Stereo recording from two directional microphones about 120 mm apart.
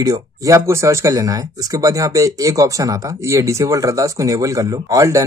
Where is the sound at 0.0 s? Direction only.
30° right (ahead or behind).